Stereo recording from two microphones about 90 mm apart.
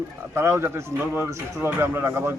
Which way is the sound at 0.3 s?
30° right (ahead or behind).